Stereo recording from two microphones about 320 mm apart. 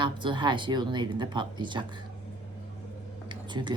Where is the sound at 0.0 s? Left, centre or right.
Centre.